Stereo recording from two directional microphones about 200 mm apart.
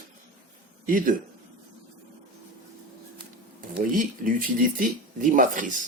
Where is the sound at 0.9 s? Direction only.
45° right (ahead or behind).